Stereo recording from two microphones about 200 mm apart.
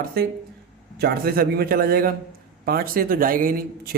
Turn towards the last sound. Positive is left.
turn(degrees=-45)  # may be behind; listen again after turning